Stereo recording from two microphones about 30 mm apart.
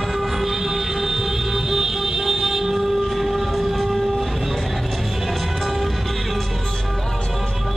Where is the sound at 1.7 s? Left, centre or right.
Centre.